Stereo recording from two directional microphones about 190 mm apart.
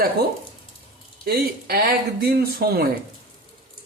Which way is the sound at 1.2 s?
55° right (ahead or behind).